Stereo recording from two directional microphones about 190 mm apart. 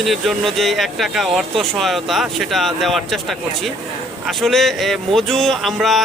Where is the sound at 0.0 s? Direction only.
Centre (ahead or behind).